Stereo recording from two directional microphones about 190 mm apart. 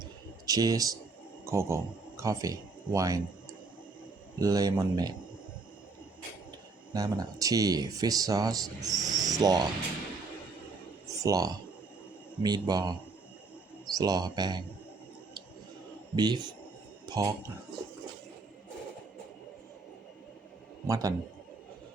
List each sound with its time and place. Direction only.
0.0 s a sound: 20° right (ahead or behind)
1.5 s speech: 15° right (ahead or behind)
4.4 s speech: 20° right (ahead or behind)
6.9 s speech: 20° right (ahead or behind)
11.2 s a man's voice: 20° right (ahead or behind)
16.1 s speech: 20° right (ahead or behind)
20.8 s a man's voice: 15° right (ahead or behind)